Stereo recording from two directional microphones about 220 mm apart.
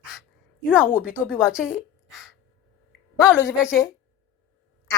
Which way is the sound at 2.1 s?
Centre (ahead or behind).